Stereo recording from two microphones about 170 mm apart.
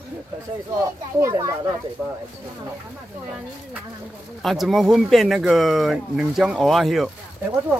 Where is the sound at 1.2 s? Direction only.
15° right (ahead or behind).